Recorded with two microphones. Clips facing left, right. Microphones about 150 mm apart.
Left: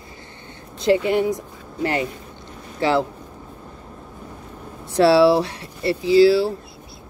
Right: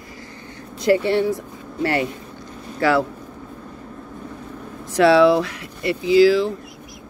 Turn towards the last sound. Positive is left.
turn(degrees=35)  # may be behind; listen again after turning